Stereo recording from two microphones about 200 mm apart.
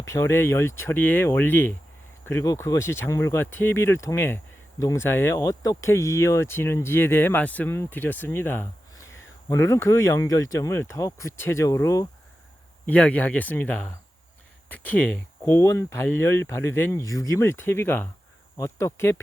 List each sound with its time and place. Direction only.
0.0 s speech: 15° left (ahead or behind)